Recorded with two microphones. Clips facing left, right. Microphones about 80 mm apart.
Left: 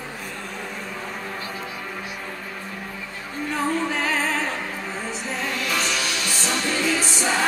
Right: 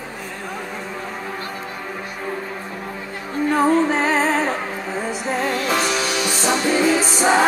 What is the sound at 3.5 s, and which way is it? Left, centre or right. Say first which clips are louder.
Music: right 7 dB; right.